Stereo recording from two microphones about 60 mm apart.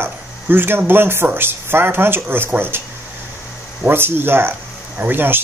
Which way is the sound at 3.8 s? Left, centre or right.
Right.